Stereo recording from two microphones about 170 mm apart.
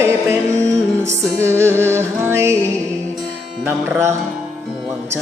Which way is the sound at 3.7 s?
10° right (ahead or behind).